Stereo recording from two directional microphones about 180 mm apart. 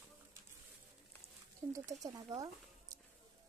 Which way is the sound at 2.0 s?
20° right (ahead or behind).